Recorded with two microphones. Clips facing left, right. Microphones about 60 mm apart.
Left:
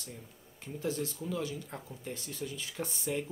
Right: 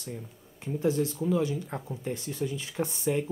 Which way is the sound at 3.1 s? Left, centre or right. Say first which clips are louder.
Right 6 dB; right.